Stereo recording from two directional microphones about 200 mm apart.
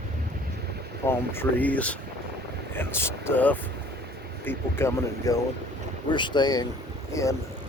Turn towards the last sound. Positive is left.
turn(degrees=15)  # may be behind; listen again after turning